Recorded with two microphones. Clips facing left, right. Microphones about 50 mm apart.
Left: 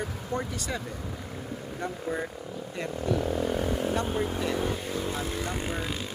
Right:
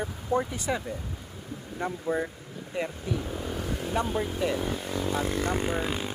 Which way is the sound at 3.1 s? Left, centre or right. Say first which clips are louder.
Left 8 dB; centre.